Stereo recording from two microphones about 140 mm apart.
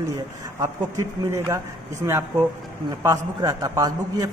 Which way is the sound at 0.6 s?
20° right (ahead or behind).